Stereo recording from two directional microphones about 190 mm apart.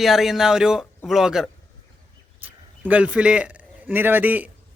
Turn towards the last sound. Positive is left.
turn(degrees=-10)  # may be behind; listen again after turning